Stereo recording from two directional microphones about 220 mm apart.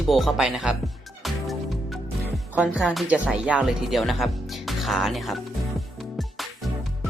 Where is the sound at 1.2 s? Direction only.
Centre (ahead or behind).